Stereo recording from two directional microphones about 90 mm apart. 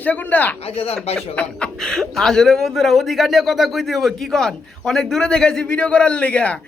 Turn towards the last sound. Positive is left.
turn(degrees=15)  # may be behind; listen again after turning